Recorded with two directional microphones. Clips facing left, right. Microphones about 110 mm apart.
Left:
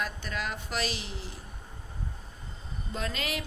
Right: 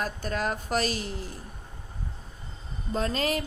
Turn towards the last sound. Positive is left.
turn(degrees=-40)  # may be behind; listen again after turning